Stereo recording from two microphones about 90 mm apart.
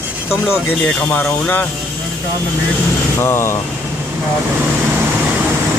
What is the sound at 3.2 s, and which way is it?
Speech, 30° left (ahead or behind).